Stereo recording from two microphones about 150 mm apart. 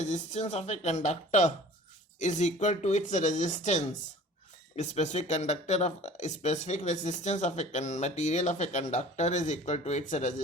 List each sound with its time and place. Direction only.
0.0 s speech: 50° left (ahead or behind)